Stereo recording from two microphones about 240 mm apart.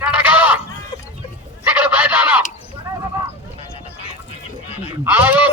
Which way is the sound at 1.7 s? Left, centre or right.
Centre.